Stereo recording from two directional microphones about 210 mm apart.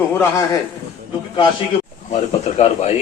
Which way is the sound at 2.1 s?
30° left (ahead or behind).